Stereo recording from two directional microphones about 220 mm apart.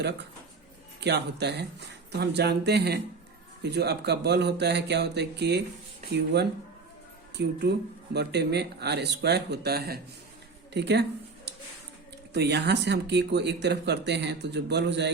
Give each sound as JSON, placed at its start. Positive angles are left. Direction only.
{"t": 0.9, "sound": "speech", "side_deg": -50}
{"t": 12.3, "sound": "speech", "side_deg": -50}